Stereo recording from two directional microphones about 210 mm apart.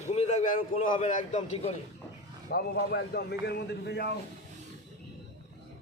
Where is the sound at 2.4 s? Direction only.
45° left (ahead or behind).